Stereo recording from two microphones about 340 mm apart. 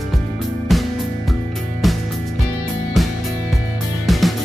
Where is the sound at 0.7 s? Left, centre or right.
Centre.